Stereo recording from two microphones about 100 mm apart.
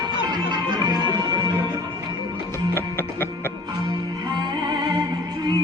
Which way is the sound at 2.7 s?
25° left (ahead or behind).